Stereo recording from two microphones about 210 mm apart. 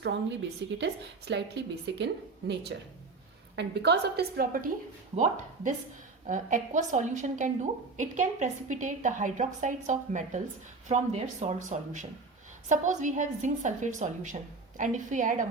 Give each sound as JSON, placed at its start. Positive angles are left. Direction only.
{"t": 0.0, "sound": "speech", "side_deg": -55}
{"t": 3.5, "sound": "a woman's voice", "side_deg": -55}